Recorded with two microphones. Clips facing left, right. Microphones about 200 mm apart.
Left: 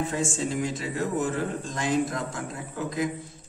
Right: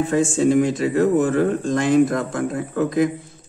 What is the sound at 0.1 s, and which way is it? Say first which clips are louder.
Speech: right 11 dB; 60° right (ahead or behind).